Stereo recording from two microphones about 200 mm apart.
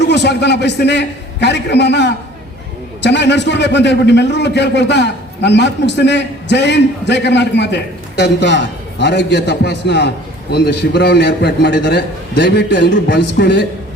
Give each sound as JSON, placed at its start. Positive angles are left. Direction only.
{"t": 0.0, "sound": "a man's voice", "side_deg": 60}